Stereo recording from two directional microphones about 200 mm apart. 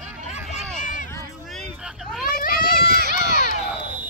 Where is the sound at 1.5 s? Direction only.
Centre (ahead or behind).